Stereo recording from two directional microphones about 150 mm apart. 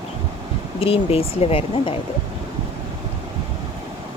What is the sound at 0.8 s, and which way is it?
Speech, 40° left (ahead or behind).